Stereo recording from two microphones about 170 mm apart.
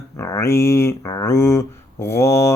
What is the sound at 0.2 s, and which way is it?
Speech, 20° left (ahead or behind).